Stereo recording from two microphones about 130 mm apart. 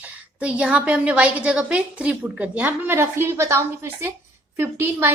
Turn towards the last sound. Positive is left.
turn(degrees=-15)  # may be behind; listen again after turning